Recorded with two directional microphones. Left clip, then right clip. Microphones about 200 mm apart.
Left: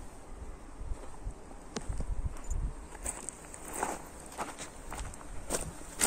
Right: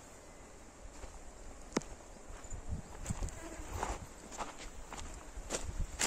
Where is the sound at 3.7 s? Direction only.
60° left (ahead or behind).